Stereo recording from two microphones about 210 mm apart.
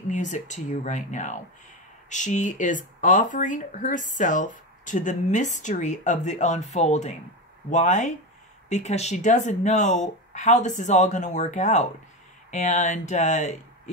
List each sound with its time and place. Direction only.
0.1 s speech: 35° left (ahead or behind)